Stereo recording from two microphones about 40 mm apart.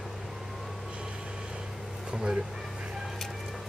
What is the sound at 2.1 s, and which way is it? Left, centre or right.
Speech, centre.